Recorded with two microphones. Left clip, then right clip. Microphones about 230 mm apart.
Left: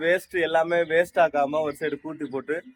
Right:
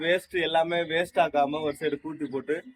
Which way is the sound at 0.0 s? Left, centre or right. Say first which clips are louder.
Left 3 dB; centre.